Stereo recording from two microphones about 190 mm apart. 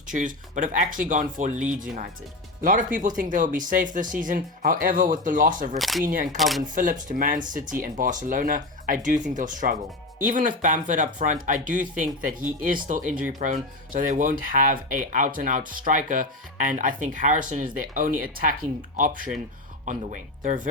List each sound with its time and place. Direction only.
0.1 s speech: 40° right (ahead or behind)
5.8 s speech: centre (ahead or behind)
6.7 s speech: 45° right (ahead or behind)